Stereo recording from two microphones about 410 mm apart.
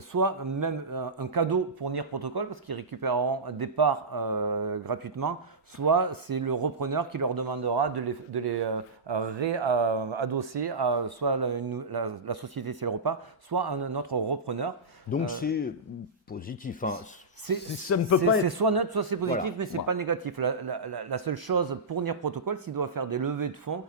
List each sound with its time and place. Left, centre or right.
0.1 s speech: right
15.1 s rub: left
17.8 s speech: left
18.4 s speech: right